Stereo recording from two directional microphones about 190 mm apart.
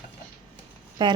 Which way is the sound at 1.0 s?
25° right (ahead or behind).